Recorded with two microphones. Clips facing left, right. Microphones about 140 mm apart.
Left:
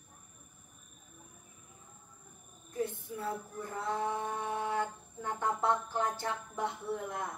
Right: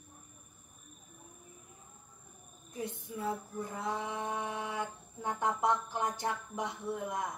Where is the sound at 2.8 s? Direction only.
15° right (ahead or behind).